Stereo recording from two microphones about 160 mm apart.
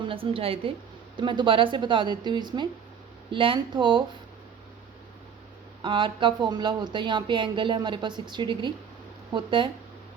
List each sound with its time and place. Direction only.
0.0 s a woman's voice: 35° right (ahead or behind)
5.8 s a woman's voice: 30° right (ahead or behind)